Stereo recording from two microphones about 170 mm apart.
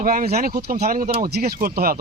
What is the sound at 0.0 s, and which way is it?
Speech, 55° right (ahead or behind).